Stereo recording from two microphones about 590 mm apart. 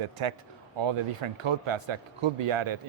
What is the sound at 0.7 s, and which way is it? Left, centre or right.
Speech, right.